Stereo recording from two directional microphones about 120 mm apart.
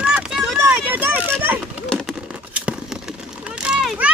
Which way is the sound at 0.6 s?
15° right (ahead or behind).